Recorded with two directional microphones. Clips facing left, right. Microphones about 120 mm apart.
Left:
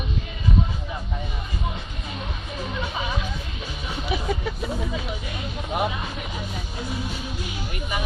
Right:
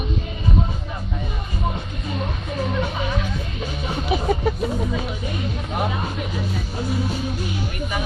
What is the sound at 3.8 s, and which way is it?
Music, 40° right (ahead or behind).